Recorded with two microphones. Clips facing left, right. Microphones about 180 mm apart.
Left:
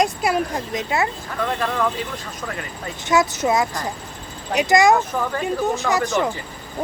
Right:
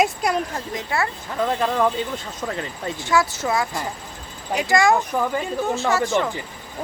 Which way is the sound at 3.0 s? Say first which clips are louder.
Left 3 dB; 20° left (ahead or behind).